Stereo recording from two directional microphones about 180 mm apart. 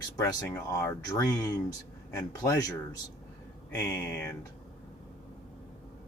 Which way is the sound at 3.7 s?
10° left (ahead or behind).